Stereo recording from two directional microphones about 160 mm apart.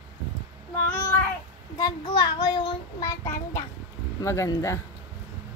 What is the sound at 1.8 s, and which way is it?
A child's voice, 25° left (ahead or behind).